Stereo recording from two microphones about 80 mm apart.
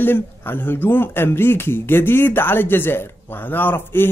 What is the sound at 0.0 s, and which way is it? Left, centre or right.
Speech, left.